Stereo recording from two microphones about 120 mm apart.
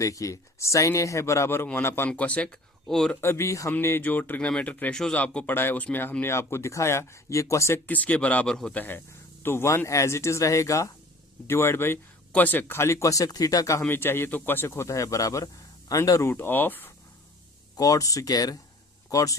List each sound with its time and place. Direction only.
0.0 s speech: 25° left (ahead or behind); by 3.2 s 5° left (ahead or behind)
3.2 s speech: 20° left (ahead or behind); by 8.8 s 5° left (ahead or behind)
9.4 s speech: 20° left (ahead or behind)
17.7 s speech: 30° left (ahead or behind)